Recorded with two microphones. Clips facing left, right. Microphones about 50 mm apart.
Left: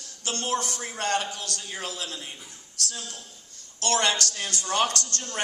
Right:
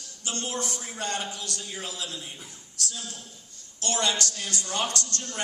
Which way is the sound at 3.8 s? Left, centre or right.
Left.